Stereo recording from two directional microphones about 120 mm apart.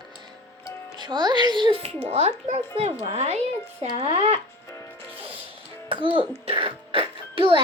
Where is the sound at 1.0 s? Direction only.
40° right (ahead or behind); by 4.4 s 55° right (ahead or behind).